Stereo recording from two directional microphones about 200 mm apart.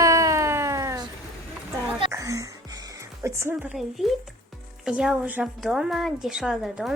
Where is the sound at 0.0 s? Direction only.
15° right (ahead or behind).